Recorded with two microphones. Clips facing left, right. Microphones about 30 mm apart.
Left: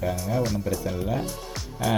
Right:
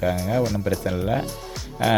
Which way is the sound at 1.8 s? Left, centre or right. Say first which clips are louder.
Right 5 dB; right.